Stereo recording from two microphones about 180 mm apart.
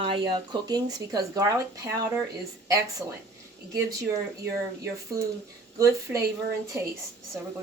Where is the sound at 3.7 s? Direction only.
20° right (ahead or behind).